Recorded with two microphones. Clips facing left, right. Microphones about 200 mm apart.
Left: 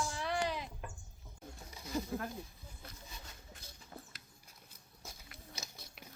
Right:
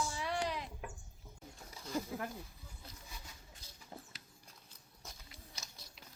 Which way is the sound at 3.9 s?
25° right (ahead or behind).